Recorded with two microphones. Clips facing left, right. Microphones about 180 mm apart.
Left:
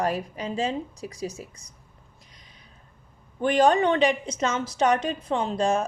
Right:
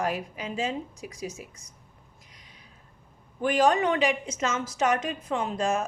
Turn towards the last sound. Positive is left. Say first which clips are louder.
# left 3 dB
turn(degrees=35)  # may be behind; listen again after turning